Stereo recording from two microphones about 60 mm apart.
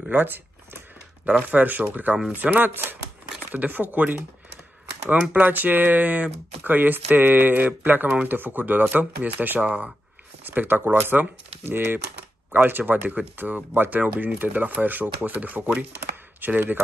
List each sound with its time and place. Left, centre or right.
0.1 s speech: right
1.2 s speech: right
16.0 s chopping: right